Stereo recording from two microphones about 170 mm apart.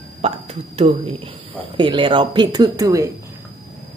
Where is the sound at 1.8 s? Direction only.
30° right (ahead or behind).